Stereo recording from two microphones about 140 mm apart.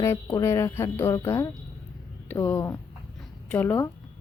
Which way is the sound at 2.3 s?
15° left (ahead or behind).